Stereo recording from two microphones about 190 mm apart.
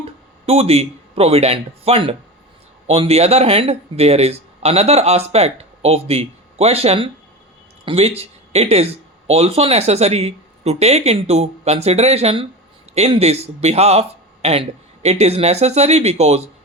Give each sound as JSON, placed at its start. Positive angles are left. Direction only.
{"t": 0.0, "sound": "speech", "side_deg": -30}